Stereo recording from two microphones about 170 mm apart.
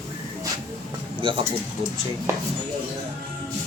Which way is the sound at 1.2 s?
30° right (ahead or behind).